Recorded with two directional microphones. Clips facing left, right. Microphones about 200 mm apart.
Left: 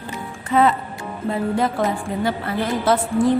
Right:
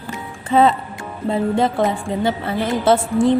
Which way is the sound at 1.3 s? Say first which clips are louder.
Right 3 dB; 25° right (ahead or behind).